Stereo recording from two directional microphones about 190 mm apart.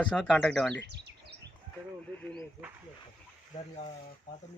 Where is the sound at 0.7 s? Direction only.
65° right (ahead or behind).